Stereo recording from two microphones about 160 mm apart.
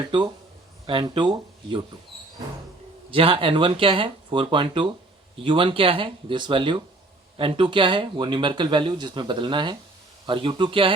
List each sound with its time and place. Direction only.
0.0 s speech: 30° right (ahead or behind)
3.1 s speech: 35° right (ahead or behind)